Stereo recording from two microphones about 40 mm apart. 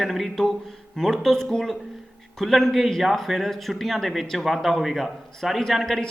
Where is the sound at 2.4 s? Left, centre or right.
Centre.